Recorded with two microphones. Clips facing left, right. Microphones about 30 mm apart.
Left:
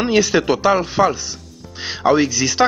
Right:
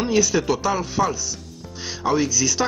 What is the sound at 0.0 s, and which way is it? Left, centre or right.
Speech, left.